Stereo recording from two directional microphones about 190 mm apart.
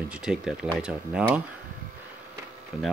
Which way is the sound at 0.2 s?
5° right (ahead or behind).